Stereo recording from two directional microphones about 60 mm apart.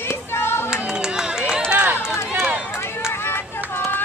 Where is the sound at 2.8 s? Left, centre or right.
Left.